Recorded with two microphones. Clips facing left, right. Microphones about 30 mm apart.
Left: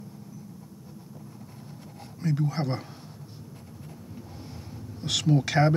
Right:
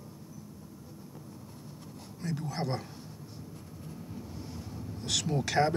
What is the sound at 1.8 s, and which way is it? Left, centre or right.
Writing, centre.